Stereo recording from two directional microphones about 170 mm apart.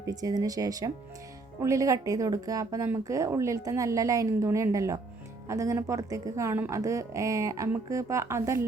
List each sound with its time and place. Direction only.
0.0 s speech: 20° right (ahead or behind)